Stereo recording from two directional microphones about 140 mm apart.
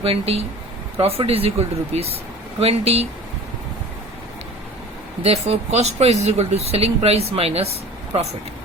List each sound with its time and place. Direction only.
0.0 s speech: 45° right (ahead or behind)
5.2 s speech: 50° right (ahead or behind)